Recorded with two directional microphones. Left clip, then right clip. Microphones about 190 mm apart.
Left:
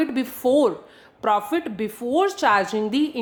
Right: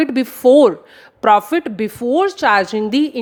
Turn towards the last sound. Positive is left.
turn(degrees=-35)  # may be behind; listen again after turning